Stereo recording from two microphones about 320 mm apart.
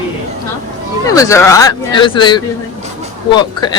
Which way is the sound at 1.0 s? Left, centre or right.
Centre.